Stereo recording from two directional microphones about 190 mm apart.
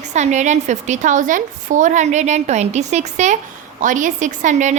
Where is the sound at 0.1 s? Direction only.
40° right (ahead or behind).